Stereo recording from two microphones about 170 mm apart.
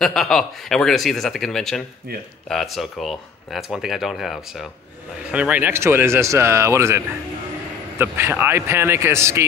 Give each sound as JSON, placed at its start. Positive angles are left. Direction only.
{"t": 0.0, "sound": "speech", "side_deg": 0}